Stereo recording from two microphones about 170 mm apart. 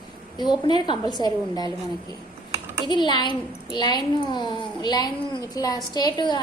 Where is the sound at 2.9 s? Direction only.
25° left (ahead or behind).